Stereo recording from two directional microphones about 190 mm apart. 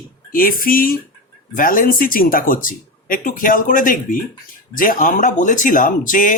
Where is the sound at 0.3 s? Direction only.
50° left (ahead or behind).